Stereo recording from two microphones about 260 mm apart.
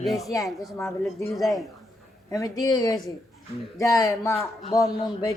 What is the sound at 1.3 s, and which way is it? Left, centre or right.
Speech, centre.